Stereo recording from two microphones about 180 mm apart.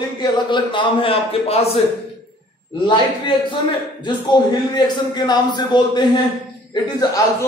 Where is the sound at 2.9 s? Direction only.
25° left (ahead or behind).